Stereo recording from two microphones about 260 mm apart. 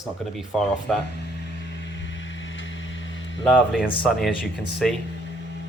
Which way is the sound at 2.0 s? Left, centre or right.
Left.